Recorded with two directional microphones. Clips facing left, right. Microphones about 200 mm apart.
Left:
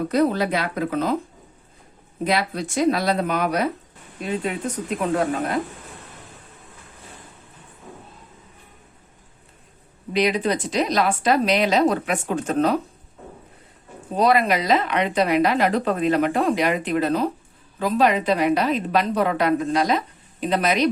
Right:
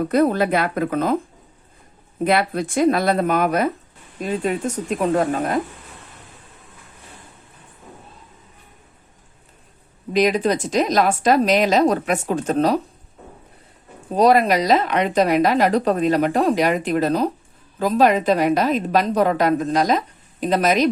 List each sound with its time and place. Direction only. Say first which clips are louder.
0.1 s a woman's voice: right 3 dB; 55° right (ahead or behind)
2.2 s a woman's voice: right 4 dB; 55° right (ahead or behind)
10.1 s a woman's voice: right 3 dB; 45° right (ahead or behind)
14.2 s a woman's voice: right 4 dB; 40° right (ahead or behind)